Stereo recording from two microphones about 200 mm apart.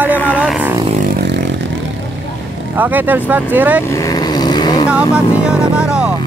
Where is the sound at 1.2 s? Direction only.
60° right (ahead or behind).